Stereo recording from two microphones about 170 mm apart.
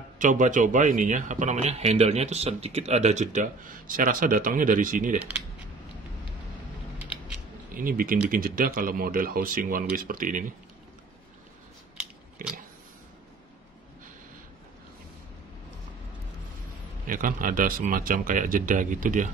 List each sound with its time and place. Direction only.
0.2 s a man's voice: 50° right (ahead or behind)
7.0 s a sound: 10° right (ahead or behind)
7.7 s speech: 55° right (ahead or behind)
12.4 s a man's voice: 55° right (ahead or behind)
17.0 s a man's voice: 55° right (ahead or behind)